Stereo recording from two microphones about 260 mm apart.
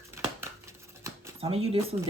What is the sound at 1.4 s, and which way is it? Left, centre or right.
Speech, right.